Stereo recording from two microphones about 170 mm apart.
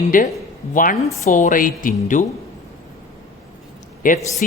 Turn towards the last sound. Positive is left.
turn(degrees=50)  # may be behind; listen again after turning